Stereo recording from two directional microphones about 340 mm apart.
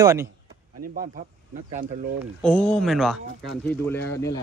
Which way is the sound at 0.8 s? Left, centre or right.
Right.